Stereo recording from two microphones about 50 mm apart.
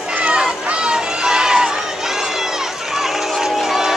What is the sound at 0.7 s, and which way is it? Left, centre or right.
Run, centre.